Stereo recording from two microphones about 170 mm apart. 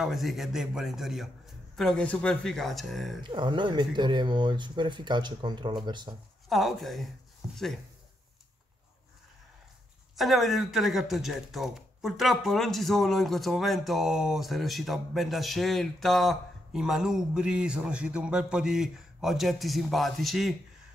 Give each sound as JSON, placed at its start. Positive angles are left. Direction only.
{"t": 0.0, "sound": "speech", "side_deg": 0}
{"t": 3.3, "sound": "speech", "side_deg": -30}
{"t": 6.5, "sound": "speech", "side_deg": 0}
{"t": 10.1, "sound": "speech", "side_deg": 0}